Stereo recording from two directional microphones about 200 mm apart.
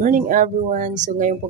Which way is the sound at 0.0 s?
40° right (ahead or behind).